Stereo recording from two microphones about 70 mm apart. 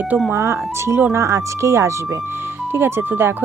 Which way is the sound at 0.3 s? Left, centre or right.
Right.